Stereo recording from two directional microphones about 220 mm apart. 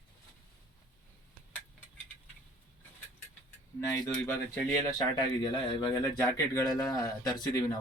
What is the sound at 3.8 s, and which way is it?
Speech, 10° left (ahead or behind).